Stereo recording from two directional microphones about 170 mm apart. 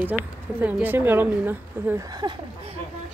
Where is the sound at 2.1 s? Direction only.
25° right (ahead or behind).